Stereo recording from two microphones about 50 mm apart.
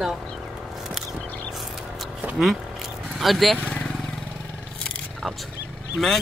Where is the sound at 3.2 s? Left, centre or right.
Centre.